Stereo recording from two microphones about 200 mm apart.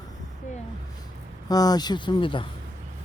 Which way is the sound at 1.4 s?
20° left (ahead or behind).